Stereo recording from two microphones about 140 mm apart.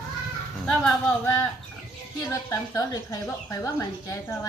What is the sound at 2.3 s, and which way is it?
Speech, 20° left (ahead or behind).